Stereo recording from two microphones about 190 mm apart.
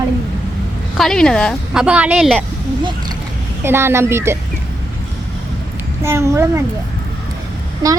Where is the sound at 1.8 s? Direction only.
5° right (ahead or behind).